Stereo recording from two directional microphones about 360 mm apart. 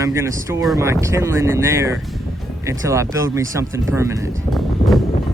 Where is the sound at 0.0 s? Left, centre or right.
Centre.